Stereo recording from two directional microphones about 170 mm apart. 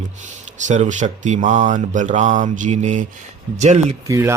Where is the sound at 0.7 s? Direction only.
45° right (ahead or behind).